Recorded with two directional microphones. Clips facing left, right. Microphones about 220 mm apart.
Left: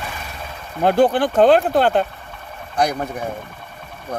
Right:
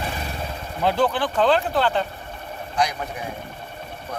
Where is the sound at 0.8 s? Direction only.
50° left (ahead or behind).